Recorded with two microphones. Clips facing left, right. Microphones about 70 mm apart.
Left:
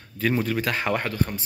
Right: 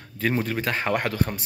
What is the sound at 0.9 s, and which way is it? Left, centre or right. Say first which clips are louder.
Speech: right 2 dB; right.